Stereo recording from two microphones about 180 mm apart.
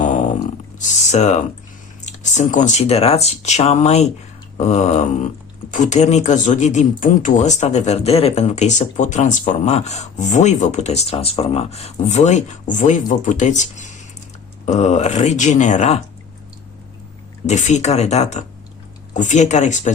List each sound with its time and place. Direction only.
0.0 s a sound: 45° left (ahead or behind)
1.1 s speech: 40° left (ahead or behind)
17.4 s speech: 40° left (ahead or behind)